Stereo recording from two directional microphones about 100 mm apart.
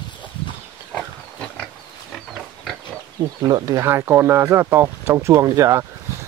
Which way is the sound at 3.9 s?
25° right (ahead or behind).